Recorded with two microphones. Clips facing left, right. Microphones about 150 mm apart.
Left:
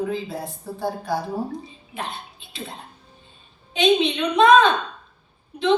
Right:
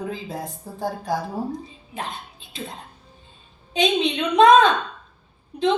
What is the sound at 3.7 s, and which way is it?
A woman's voice, 40° right (ahead or behind).